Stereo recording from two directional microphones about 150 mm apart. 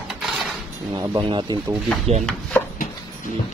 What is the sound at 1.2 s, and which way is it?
Speech, 35° right (ahead or behind).